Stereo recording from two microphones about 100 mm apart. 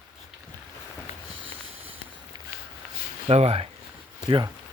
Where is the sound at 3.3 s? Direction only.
85° right.